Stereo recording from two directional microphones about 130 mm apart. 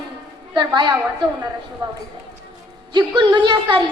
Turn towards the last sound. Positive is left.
turn(degrees=-35)  # may be behind; listen again after turning